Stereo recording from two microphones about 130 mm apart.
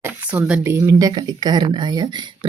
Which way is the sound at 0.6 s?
20° right (ahead or behind).